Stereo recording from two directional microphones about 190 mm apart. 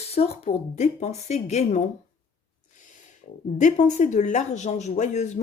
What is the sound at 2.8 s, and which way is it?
Speech, 40° left (ahead or behind).